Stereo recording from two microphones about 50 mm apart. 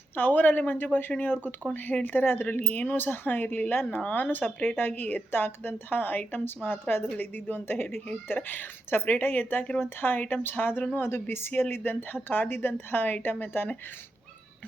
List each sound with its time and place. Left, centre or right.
0.2 s a woman's voice: left